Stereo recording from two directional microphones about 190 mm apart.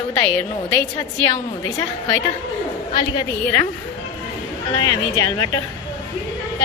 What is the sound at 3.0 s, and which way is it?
Speech, 20° left (ahead or behind).